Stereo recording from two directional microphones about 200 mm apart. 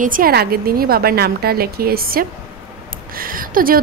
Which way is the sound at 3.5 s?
45° right (ahead or behind).